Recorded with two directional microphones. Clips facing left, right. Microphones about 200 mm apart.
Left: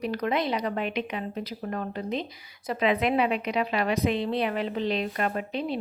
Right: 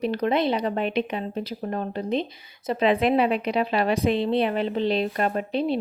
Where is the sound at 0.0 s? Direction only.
25° right (ahead or behind).